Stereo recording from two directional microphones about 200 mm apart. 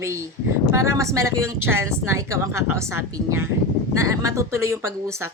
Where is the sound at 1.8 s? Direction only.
90° right.